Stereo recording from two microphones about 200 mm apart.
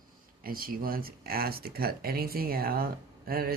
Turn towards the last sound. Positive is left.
turn(degrees=-50)  # may be behind; listen again after turning